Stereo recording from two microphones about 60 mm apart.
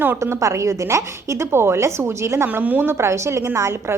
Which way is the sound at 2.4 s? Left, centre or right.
Right.